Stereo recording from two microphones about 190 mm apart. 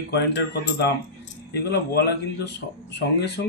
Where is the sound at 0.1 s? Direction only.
65° left (ahead or behind).